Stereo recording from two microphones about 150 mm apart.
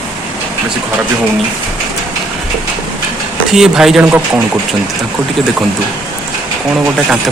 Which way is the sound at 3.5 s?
5° right (ahead or behind).